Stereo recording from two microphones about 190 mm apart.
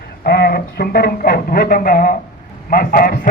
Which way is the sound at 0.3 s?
55° left (ahead or behind).